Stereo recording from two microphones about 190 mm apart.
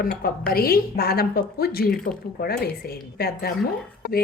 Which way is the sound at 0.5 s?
50° left (ahead or behind).